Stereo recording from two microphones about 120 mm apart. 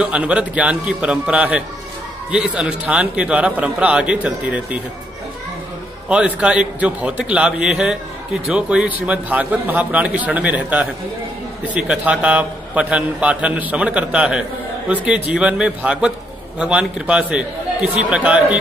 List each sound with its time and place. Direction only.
0.0 s a man's voice: 10° right (ahead or behind)
6.0 s a man's voice: 10° right (ahead or behind)